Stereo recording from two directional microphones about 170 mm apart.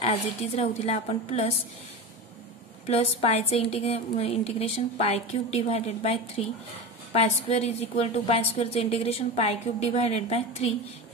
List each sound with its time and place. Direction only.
0.6 s a woman's voice: 35° left (ahead or behind)
2.9 s a woman's voice: 35° left (ahead or behind)